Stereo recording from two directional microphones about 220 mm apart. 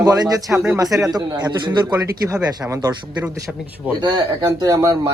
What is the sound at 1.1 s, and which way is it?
Speech, 20° right (ahead or behind).